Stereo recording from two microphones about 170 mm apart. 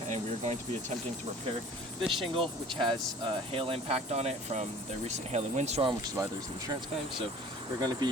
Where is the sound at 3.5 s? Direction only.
35° right (ahead or behind).